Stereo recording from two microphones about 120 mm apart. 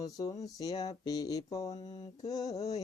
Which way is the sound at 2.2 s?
30° left (ahead or behind).